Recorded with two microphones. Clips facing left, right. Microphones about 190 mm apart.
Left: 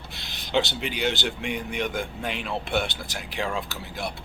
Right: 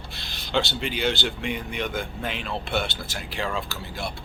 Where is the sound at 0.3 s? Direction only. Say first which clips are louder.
Left 1 dB; 20° left (ahead or behind).